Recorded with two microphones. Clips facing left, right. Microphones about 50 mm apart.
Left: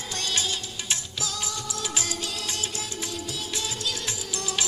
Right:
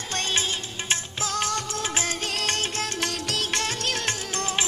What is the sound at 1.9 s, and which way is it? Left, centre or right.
Music of bollywood, right.